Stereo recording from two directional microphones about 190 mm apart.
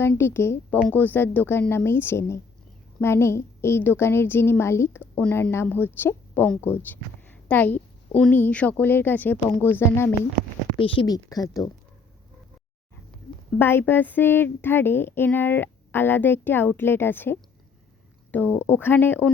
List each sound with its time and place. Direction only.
0.0 s a woman's voice: 10° left (ahead or behind)
10.8 s speech: 30° left (ahead or behind)
13.6 s a woman's voice: 10° left (ahead or behind)